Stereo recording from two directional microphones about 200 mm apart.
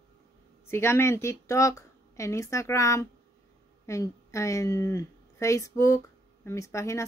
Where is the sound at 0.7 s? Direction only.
15° left (ahead or behind).